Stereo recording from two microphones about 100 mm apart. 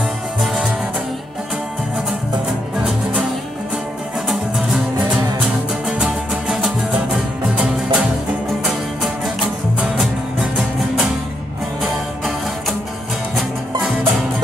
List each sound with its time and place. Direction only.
4.3 s music: centre (ahead or behind)
13.4 s music: centre (ahead or behind)